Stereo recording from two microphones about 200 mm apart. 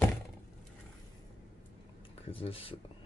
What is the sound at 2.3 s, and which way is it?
Speech, 25° left (ahead or behind).